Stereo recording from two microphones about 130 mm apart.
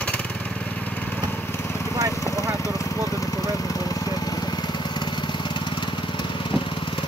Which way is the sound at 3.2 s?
25° left (ahead or behind).